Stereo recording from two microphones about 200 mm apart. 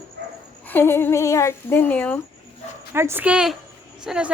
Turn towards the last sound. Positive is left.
turn(degrees=-5)  # may be behind; listen again after turning